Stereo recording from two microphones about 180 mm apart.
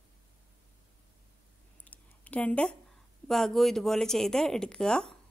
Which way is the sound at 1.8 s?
10° left (ahead or behind).